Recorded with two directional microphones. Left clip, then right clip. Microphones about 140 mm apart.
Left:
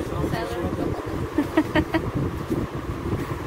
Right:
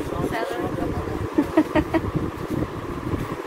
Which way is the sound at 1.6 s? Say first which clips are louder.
Right 1 dB; 10° right (ahead or behind).